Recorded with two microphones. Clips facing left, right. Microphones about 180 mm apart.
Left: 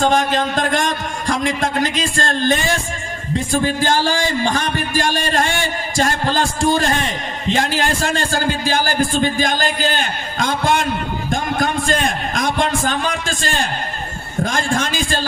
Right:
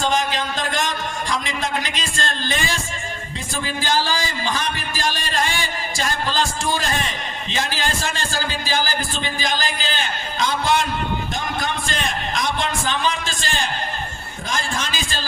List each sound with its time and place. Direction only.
0.0 s a man's voice: 50° left (ahead or behind)